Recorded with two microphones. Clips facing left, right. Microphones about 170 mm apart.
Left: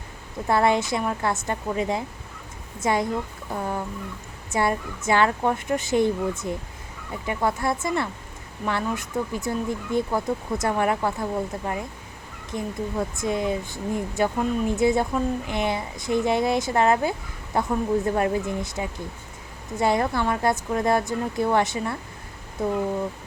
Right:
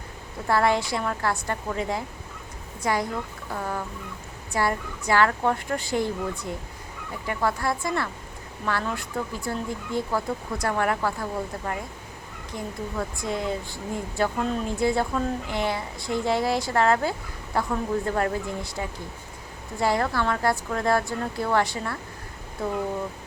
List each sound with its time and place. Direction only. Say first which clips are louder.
0.4 s speech: left 2 dB; 20° left (ahead or behind)